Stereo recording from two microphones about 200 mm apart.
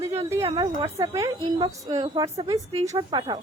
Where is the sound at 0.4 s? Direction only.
20° right (ahead or behind).